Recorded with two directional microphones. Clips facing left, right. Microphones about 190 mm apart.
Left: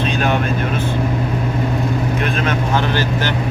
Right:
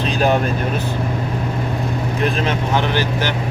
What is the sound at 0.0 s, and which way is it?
Vehicle, 35° right (ahead or behind).